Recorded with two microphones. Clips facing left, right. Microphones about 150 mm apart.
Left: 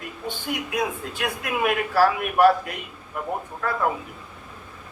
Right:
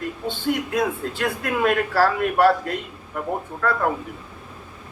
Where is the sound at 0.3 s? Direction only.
15° left (ahead or behind).